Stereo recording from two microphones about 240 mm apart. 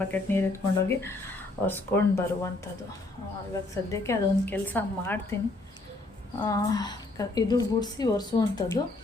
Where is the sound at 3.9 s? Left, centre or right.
Centre.